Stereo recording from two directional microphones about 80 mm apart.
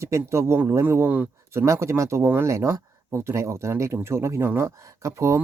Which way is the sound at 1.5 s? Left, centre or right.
Right.